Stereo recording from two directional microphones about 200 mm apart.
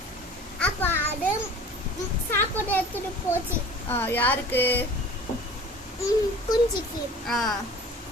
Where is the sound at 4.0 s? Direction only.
10° left (ahead or behind).